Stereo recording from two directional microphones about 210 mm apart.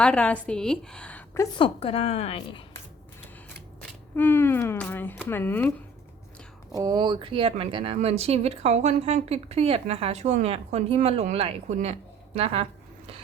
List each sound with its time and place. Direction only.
0.0 s a woman's voice: 5° left (ahead or behind)
1.5 s a woman's voice: 25° left (ahead or behind)
3.8 s speech: 10° left (ahead or behind)
6.7 s speech: 20° right (ahead or behind)